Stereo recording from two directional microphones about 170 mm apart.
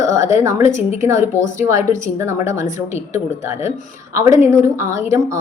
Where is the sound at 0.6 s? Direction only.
45° left (ahead or behind).